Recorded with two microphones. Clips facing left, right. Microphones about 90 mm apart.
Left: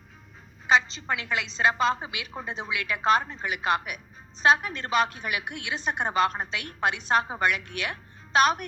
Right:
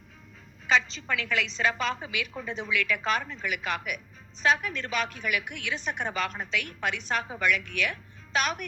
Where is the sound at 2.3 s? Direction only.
40° left (ahead or behind).